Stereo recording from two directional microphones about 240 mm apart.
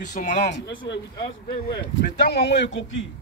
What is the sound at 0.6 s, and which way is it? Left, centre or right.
A man's voice, left.